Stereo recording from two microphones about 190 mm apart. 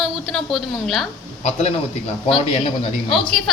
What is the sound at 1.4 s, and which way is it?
A man's voice, 35° left (ahead or behind).